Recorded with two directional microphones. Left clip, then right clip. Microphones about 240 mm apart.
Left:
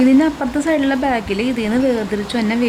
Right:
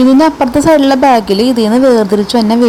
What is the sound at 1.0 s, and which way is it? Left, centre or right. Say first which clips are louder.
A woman's voice: right 11 dB; centre.